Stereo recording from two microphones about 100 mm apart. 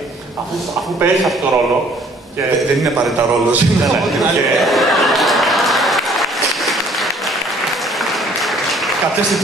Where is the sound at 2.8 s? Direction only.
Centre (ahead or behind).